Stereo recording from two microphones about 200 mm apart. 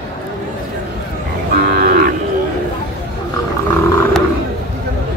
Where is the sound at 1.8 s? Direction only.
45° right (ahead or behind).